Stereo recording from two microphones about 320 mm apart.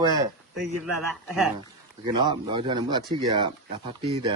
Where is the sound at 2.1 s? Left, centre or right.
Centre.